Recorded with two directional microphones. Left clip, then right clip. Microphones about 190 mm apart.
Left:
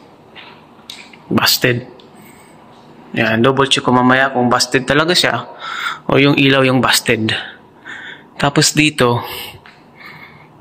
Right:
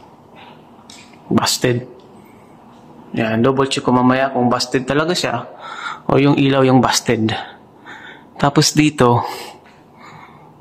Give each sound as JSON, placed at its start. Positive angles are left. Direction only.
{"t": 1.3, "sound": "speech", "side_deg": -15}
{"t": 3.2, "sound": "speech", "side_deg": 0}
{"t": 5.6, "sound": "a sound", "side_deg": -15}
{"t": 6.0, "sound": "speech", "side_deg": -5}
{"t": 6.3, "sound": "speech", "side_deg": -15}